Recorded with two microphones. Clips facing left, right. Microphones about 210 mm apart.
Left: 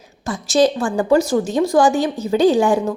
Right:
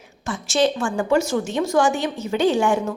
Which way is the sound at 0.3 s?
35° left (ahead or behind).